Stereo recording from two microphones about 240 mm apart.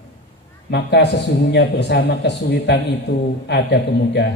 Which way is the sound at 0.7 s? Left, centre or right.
Left.